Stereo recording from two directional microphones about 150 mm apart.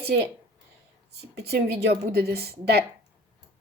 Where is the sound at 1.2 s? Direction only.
90° right.